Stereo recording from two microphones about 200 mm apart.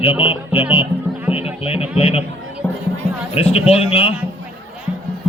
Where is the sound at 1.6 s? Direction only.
30° left (ahead or behind).